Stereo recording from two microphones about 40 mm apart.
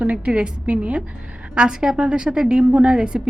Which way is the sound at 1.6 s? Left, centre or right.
Centre.